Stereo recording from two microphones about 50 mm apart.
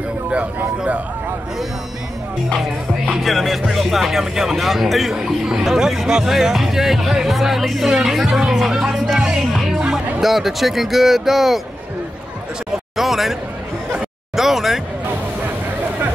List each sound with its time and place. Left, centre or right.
0.6 s speech: right
3.1 s speech: centre
5.1 s speech: centre
9.4 s music: centre
10.2 s speech: centre
12.9 s speech: centre
14.3 s a sound: centre